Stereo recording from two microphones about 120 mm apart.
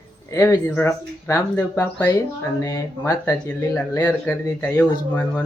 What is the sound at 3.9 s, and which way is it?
Speech, 15° left (ahead or behind).